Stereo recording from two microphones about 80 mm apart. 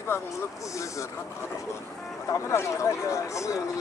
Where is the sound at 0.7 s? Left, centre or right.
Left.